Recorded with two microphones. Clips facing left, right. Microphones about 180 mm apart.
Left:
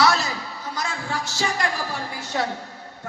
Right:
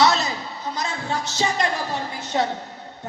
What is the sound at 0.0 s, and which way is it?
Music, 20° right (ahead or behind).